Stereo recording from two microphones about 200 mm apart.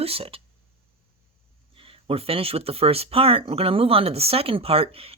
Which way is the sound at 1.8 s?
25° right (ahead or behind).